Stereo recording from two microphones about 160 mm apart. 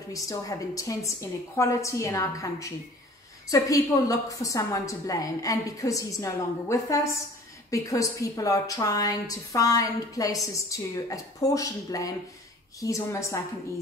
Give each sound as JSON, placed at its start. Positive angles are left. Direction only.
{"t": 0.1, "sound": "a woman's voice", "side_deg": 20}